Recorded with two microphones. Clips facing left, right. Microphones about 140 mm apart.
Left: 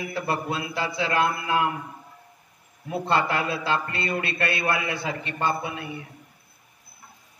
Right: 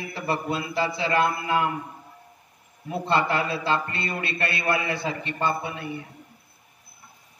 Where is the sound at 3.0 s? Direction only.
35° right (ahead or behind).